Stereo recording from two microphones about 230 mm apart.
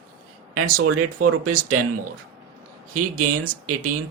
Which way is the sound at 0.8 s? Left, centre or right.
Right.